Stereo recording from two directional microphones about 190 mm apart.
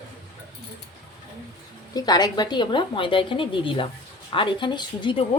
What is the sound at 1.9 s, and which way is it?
Speech, 20° left (ahead or behind).